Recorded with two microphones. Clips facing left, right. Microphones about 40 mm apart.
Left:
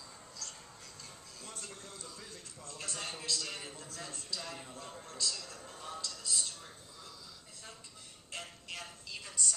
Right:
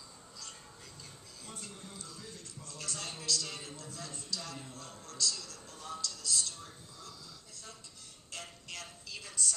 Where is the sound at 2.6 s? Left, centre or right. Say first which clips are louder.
Left 1 dB; centre.